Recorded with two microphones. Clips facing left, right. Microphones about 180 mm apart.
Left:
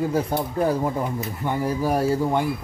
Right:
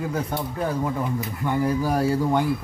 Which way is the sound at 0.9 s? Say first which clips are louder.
Even; 25° left (ahead or behind).